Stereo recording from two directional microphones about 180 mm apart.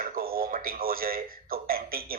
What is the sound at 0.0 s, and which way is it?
A man's voice, 55° right (ahead or behind).